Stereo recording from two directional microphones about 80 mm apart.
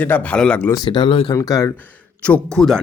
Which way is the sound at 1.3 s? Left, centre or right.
Left.